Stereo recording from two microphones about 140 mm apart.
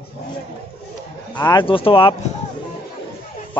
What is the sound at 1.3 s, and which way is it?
Speech, 30° left (ahead or behind).